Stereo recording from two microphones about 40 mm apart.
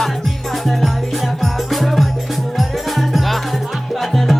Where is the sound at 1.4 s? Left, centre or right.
Centre.